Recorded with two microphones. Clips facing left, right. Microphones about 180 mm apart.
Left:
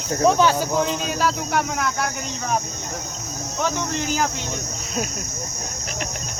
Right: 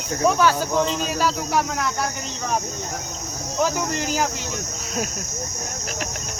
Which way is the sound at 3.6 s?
5° right (ahead or behind).